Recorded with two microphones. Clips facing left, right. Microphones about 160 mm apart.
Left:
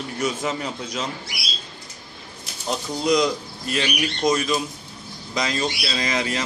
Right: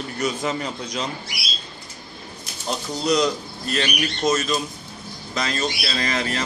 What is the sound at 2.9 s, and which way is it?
Speech, 10° left (ahead or behind).